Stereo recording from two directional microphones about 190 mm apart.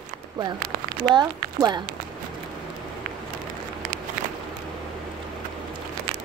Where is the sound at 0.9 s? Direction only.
25° right (ahead or behind).